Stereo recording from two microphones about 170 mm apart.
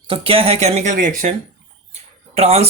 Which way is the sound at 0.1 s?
30° right (ahead or behind).